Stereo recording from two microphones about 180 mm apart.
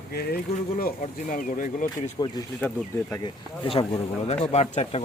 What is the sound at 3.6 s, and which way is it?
Speech, 30° left (ahead or behind).